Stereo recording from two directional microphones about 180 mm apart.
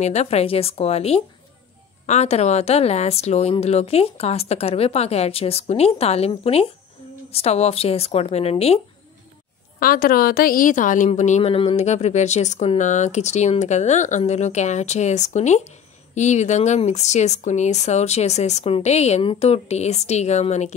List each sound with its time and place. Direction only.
0.0 s a woman's voice: 35° left (ahead or behind)
9.8 s a woman's voice: 55° left (ahead or behind)